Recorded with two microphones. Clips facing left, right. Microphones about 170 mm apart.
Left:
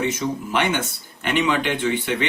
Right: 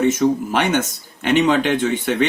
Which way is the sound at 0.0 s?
45° right (ahead or behind).